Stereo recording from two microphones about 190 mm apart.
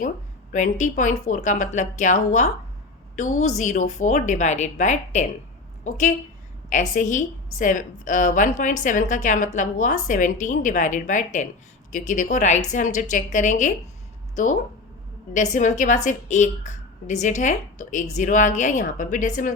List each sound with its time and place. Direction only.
0.5 s a woman's voice: 40° left (ahead or behind)